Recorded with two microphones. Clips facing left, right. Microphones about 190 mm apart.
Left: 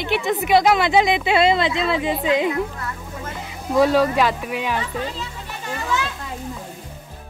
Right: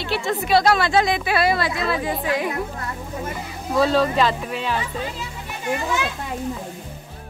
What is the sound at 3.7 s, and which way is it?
Speech, 15° left (ahead or behind).